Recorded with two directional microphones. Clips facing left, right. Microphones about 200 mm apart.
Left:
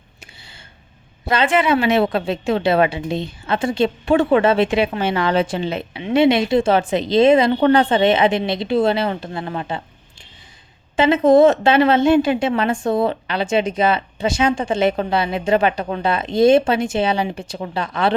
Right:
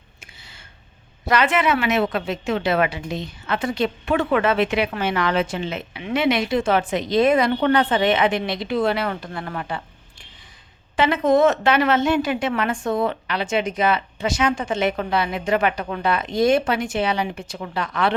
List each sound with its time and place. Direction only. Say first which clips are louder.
1.3 s a woman's voice: left 3 dB; 30° left (ahead or behind)
10.9 s a woman's voice: left 5 dB; 25° left (ahead or behind)